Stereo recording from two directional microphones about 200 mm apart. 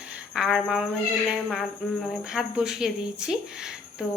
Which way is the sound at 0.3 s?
Centre (ahead or behind).